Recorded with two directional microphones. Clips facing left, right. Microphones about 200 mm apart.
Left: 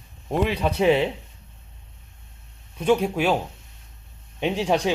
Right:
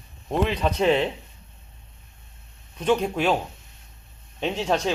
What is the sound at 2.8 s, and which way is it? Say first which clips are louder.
Speech: left 2 dB; 5° left (ahead or behind).